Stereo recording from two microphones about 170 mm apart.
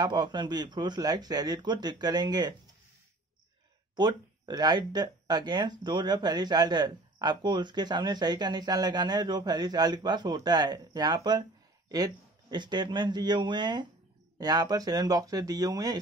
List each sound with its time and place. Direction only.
0.0 s speech: 25° right (ahead or behind)
3.9 s speech: 25° right (ahead or behind)